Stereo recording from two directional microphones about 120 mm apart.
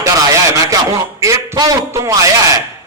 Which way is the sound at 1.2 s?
30° right (ahead or behind).